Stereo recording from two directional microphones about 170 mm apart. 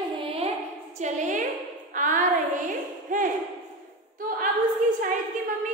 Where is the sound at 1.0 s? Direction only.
45° right (ahead or behind).